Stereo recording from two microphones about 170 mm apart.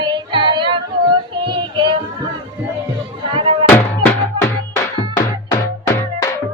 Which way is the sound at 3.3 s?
30° right (ahead or behind).